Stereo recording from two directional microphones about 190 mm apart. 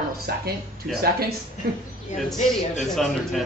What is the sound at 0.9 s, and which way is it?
Speech, centre (ahead or behind).